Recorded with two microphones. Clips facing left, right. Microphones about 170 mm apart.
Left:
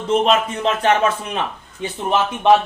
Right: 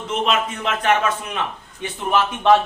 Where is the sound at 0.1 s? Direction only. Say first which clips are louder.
Left 5 dB; 35° left (ahead or behind).